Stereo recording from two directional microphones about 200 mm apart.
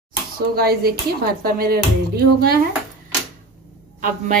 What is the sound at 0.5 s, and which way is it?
A woman's voice, 50° right (ahead or behind).